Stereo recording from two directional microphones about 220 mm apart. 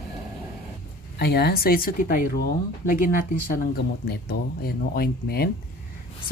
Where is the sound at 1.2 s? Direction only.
45° left (ahead or behind).